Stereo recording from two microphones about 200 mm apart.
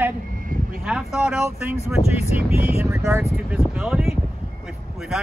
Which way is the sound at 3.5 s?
5° right (ahead or behind).